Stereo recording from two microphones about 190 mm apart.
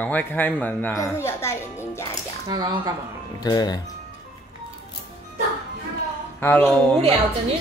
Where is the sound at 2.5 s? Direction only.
20° right (ahead or behind).